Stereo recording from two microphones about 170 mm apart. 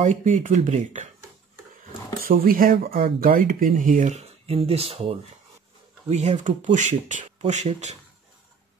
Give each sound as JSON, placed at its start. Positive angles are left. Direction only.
{"t": 0.0, "sound": "speech", "side_deg": -45}
{"t": 2.2, "sound": "speech", "side_deg": -55}